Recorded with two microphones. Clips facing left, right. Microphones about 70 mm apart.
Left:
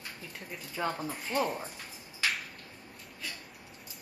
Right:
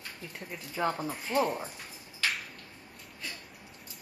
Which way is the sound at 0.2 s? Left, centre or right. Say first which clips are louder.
Right 1 dB; centre.